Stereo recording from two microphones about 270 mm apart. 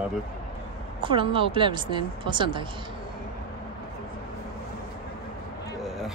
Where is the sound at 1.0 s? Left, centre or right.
Centre.